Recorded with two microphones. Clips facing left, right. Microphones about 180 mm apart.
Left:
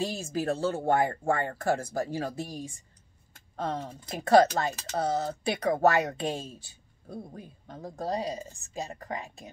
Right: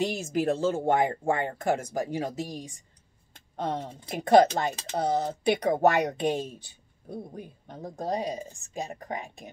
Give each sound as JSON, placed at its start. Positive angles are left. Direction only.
{"t": 0.0, "sound": "speech", "side_deg": -20}